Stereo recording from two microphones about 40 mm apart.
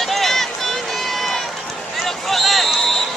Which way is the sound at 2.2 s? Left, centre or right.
Centre.